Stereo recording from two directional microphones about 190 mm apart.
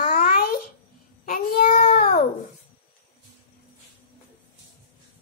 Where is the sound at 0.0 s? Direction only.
50° left (ahead or behind).